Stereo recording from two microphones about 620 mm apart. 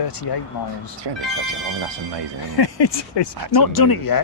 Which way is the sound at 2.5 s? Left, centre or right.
Left.